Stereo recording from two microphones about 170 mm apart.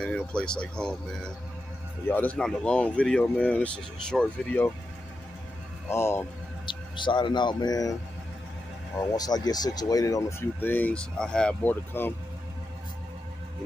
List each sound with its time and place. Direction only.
0.0 s speech: 5° left (ahead or behind)
5.9 s speech: 15° left (ahead or behind)
6.6 s speech: 30° left (ahead or behind)
9.1 s speech: 20° left (ahead or behind)